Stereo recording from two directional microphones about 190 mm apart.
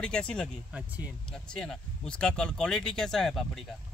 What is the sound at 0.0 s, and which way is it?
Speech, 5° left (ahead or behind).